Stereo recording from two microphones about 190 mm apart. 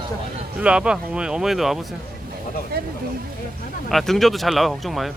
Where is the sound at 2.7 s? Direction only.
55° right (ahead or behind).